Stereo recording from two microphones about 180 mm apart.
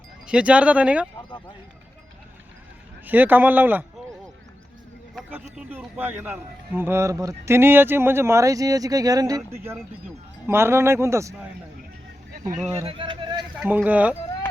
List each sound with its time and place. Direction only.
0.3 s a man's voice: 5° right (ahead or behind)
3.1 s a man's voice: 10° right (ahead or behind)
5.3 s a man's voice: 10° right (ahead or behind)
12.7 s speech: 30° right (ahead or behind)
13.6 s a man's voice: 10° right (ahead or behind)